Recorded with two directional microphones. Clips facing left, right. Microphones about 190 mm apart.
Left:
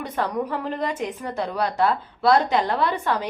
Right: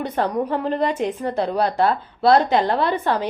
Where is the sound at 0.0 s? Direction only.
30° right (ahead or behind).